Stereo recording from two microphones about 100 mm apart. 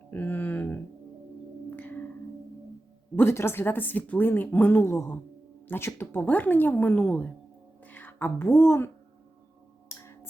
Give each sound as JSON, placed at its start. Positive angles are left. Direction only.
{"t": 0.1, "sound": "a sound", "side_deg": 20}
{"t": 1.7, "sound": "music", "side_deg": 20}
{"t": 3.2, "sound": "a woman's voice", "side_deg": 25}